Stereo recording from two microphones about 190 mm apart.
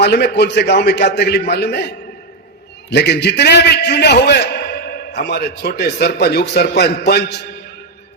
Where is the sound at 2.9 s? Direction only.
60° left (ahead or behind).